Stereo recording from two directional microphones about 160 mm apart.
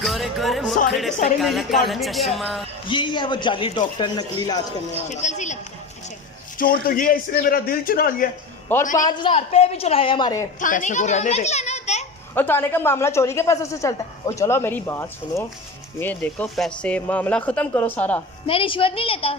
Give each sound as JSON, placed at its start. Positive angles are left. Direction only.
{"t": 0.0, "sound": "speech", "side_deg": 0}
{"t": 2.9, "sound": "speech", "side_deg": 30}
{"t": 5.0, "sound": "speech", "side_deg": 45}
{"t": 6.6, "sound": "a man's voice", "side_deg": 60}
{"t": 8.7, "sound": "speech", "side_deg": 15}
{"t": 9.0, "sound": "a woman's voice", "side_deg": 30}
{"t": 10.6, "sound": "a child's voice", "side_deg": 55}
{"t": 12.3, "sound": "speech", "side_deg": 15}
{"t": 18.4, "sound": "a woman's voice", "side_deg": 35}